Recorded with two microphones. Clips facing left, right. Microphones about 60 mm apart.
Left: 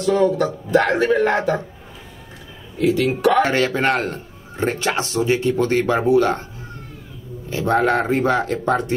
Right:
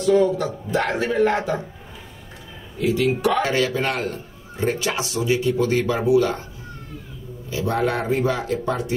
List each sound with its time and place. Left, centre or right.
0.0 s a man's voice: left
2.8 s speech: left
3.3 s a man's voice: left
7.4 s a man's voice: left